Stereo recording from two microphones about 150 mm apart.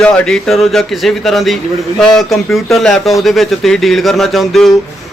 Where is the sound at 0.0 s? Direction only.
5° left (ahead or behind).